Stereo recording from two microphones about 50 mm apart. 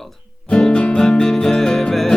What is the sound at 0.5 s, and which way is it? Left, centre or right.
Music, centre.